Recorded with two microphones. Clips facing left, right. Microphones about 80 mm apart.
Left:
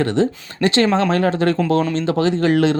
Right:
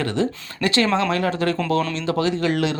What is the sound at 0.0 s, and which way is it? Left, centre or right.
Speech, left.